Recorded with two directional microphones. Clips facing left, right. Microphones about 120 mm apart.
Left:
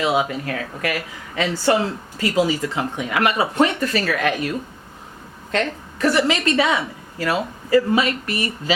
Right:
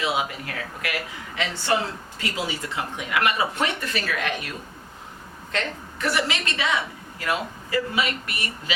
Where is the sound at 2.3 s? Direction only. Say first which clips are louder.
Left 10 dB; 35° left (ahead or behind).